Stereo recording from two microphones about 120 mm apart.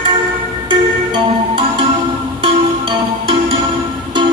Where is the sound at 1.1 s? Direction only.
45° right (ahead or behind).